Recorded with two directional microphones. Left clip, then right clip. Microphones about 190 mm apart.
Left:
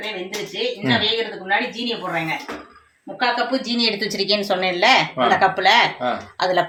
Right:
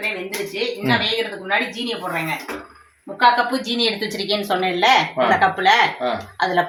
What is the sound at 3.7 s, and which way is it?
Speech, 40° left (ahead or behind).